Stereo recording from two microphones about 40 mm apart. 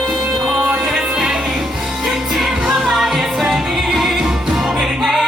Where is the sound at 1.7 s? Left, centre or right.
Centre.